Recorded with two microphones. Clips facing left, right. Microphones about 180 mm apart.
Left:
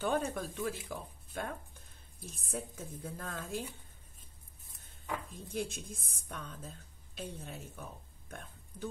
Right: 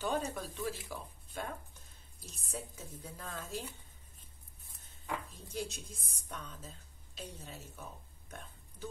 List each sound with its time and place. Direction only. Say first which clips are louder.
0.0 s speech: left 2 dB; 55° left (ahead or behind)
5.3 s speech: left 3 dB; 55° left (ahead or behind)